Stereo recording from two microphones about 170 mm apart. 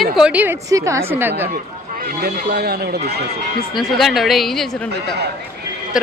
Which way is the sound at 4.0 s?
Centre (ahead or behind).